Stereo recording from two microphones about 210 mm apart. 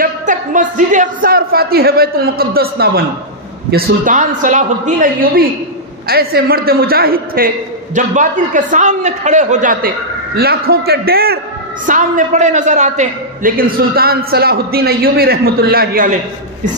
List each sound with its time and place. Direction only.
0.0 s a man's voice: 40° right (ahead or behind)